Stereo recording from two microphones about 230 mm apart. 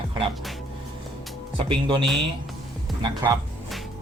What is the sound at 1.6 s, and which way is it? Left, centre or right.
Speech, right.